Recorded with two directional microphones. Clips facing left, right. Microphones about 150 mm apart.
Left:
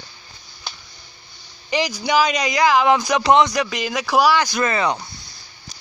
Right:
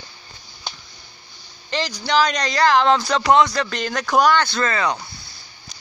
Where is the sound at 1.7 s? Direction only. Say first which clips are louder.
Left 2 dB; 15° left (ahead or behind).